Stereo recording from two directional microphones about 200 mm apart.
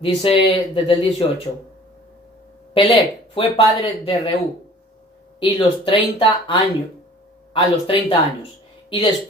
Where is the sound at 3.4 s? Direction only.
25° left (ahead or behind).